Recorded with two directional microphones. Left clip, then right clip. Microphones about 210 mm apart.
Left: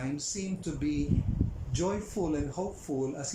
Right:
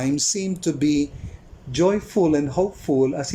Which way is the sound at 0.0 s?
45° right (ahead or behind).